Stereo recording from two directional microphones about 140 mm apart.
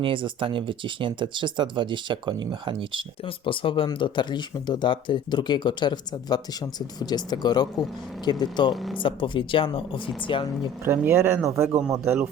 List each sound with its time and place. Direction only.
0.0 s speech: 35° right (ahead or behind)
3.2 s speech: 40° left (ahead or behind)
8.7 s speech: centre (ahead or behind)
9.0 s speech: 35° left (ahead or behind)
10.8 s speech: 15° right (ahead or behind)